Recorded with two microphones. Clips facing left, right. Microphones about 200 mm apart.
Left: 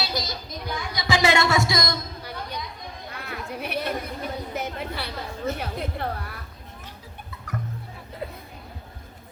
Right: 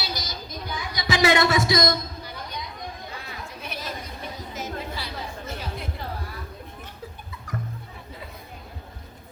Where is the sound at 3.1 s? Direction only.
60° left (ahead or behind).